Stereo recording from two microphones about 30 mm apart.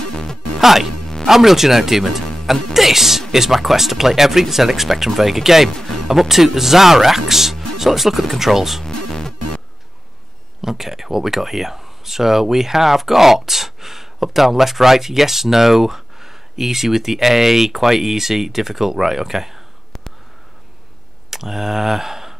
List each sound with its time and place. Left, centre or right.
0.0 s music: centre
0.6 s speech: centre
8.8 s music: centre
10.6 s speech: centre
21.3 s speech: centre